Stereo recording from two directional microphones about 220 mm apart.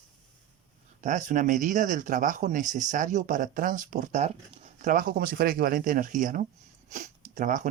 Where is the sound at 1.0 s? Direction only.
35° right (ahead or behind).